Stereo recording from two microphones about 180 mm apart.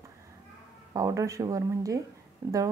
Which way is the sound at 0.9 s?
20° right (ahead or behind).